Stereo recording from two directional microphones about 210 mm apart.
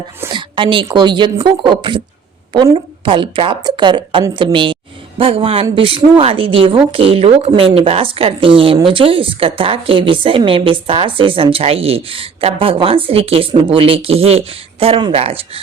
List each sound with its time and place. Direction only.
0.2 s a woman's voice: 20° right (ahead or behind)